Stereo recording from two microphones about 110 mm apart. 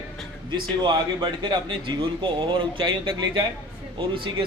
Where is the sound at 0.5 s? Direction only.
40° right (ahead or behind).